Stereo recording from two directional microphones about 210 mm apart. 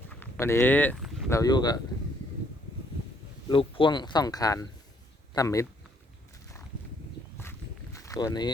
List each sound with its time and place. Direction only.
0.1 s a sound: 10° left (ahead or behind)
1.3 s speech: 15° left (ahead or behind)
3.5 s speech: 25° left (ahead or behind)
7.9 s speech: 15° left (ahead or behind)